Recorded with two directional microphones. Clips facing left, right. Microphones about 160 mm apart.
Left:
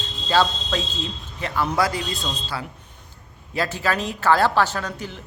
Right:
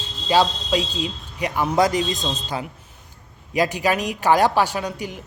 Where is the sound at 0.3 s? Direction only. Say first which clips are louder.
Right 2 dB; 15° right (ahead or behind).